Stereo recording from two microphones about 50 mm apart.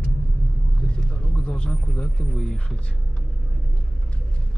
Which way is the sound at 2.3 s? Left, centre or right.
Centre.